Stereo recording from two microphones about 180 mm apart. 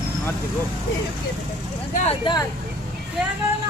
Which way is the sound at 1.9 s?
40° left (ahead or behind).